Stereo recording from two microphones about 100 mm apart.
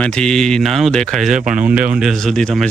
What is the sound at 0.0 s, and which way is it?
Speech, 10° left (ahead or behind).